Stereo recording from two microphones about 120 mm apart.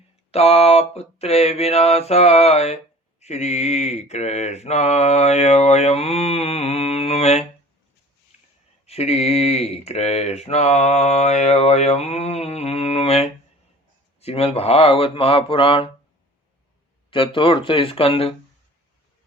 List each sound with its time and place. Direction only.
0.3 s speech: 60° left (ahead or behind)
8.9 s speech: 60° left (ahead or behind)
17.1 s speech: 45° left (ahead or behind)